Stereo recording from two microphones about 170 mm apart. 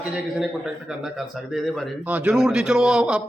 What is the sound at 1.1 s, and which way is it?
A man's voice, centre (ahead or behind).